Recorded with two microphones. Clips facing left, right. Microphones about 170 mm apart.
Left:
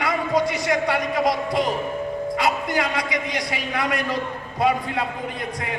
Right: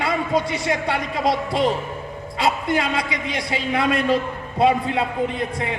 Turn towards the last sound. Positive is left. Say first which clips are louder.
# right 6 dB
turn(degrees=-25)  # may be behind; listen again after turning